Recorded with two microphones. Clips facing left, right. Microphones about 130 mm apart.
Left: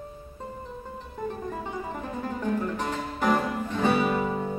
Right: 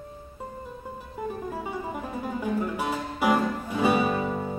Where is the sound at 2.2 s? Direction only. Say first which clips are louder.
Even; 10° right (ahead or behind).